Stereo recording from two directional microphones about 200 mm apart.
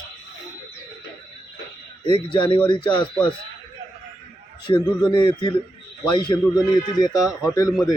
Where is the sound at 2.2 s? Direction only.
25° left (ahead or behind).